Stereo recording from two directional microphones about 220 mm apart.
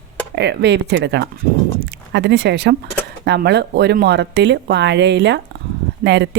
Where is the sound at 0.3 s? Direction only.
50° right (ahead or behind).